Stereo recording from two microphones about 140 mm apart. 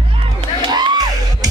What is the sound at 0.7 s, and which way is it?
Music, 30° right (ahead or behind).